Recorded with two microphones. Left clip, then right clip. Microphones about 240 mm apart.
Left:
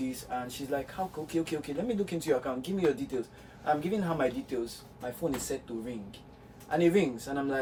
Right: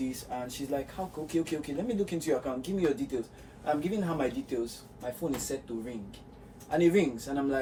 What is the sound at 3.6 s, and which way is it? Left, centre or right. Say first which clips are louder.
Speech: left 1 dB; centre.